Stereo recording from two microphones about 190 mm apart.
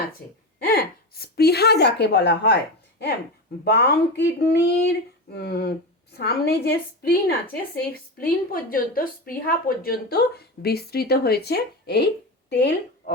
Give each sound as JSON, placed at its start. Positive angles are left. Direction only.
{"t": 0.6, "sound": "speech", "side_deg": 55}
{"t": 3.6, "sound": "speech", "side_deg": 60}